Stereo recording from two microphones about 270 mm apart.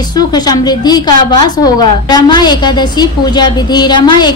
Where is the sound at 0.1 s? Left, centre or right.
Centre.